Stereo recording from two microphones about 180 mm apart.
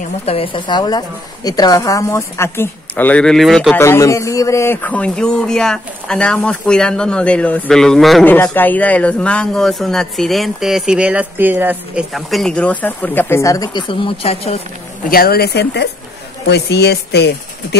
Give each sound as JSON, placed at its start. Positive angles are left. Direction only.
{"t": 0.2, "sound": "a man's voice", "side_deg": 30}
{"t": 3.7, "sound": "a man's voice", "side_deg": 15}
{"t": 15.0, "sound": "speech", "side_deg": 55}